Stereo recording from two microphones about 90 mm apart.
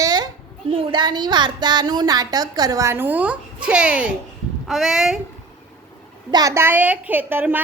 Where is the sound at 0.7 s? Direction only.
80° right; by 2.9 s 45° right (ahead or behind).